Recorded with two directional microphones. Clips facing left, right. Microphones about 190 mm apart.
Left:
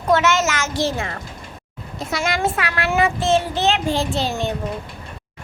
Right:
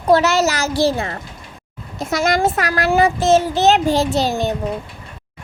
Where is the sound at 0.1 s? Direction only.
35° right (ahead or behind).